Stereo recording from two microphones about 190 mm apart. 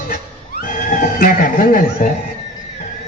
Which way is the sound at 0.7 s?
45° left (ahead or behind).